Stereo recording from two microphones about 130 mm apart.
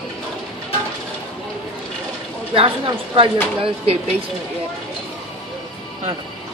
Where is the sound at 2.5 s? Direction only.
45° right (ahead or behind).